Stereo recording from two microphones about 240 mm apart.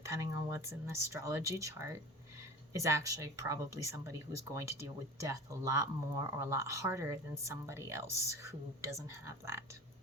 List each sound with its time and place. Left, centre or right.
0.1 s speech: centre